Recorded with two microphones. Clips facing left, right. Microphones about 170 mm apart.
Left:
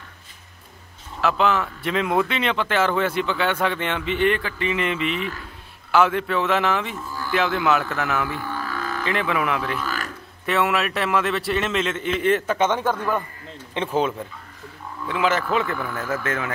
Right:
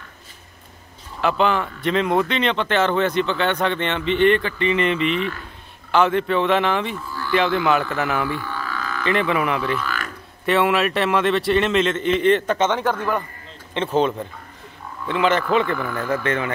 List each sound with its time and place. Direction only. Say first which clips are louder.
1.2 s speech: right 1 dB; centre (ahead or behind)
8.4 s a sound: even; 45° left (ahead or behind)
9.0 s speech: right 4 dB; centre (ahead or behind)
15.0 s speech: right 3 dB; 5° left (ahead or behind)